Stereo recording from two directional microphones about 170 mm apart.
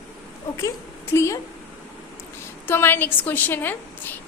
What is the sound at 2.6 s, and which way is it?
A woman's voice, 10° left (ahead or behind).